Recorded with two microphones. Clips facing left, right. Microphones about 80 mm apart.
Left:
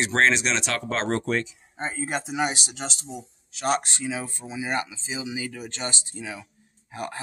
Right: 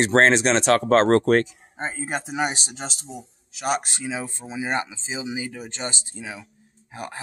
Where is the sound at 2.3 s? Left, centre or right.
Right.